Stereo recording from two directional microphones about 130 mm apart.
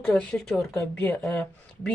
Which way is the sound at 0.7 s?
15° left (ahead or behind).